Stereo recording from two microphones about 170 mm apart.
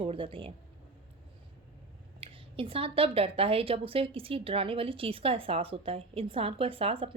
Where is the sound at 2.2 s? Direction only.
30° right (ahead or behind).